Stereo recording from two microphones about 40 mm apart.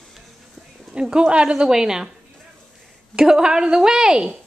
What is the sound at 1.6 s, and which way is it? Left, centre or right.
Speech, centre.